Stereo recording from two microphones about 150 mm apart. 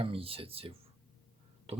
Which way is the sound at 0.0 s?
40° right (ahead or behind).